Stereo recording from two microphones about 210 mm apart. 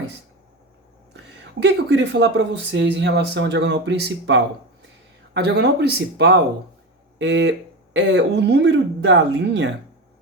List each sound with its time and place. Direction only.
1.1 s speech: 55° right (ahead or behind)